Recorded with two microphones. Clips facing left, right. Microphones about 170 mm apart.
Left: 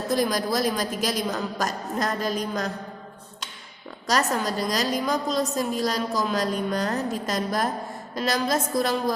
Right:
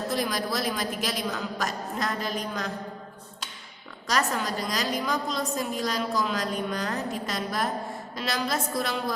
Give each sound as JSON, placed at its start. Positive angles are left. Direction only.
{"t": 0.1, "sound": "a woman's voice", "side_deg": 40}
{"t": 4.0, "sound": "a woman's voice", "side_deg": 40}